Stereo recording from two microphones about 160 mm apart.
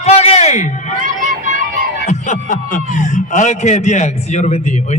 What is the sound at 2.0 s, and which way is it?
A man's voice, 50° left (ahead or behind).